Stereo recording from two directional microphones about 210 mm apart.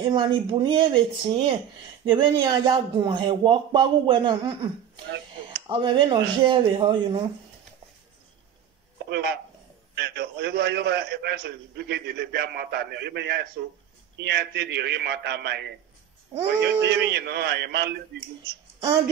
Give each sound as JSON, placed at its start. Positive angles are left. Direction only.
{"t": 0.0, "sound": "speech", "side_deg": -20}
{"t": 5.7, "sound": "speech", "side_deg": -20}
{"t": 9.1, "sound": "a man's voice", "side_deg": -50}